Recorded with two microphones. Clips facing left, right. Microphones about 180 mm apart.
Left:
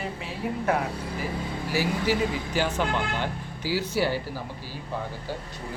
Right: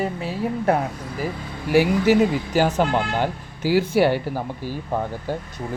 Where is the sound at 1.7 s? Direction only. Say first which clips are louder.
Right 9 dB; 60° right (ahead or behind).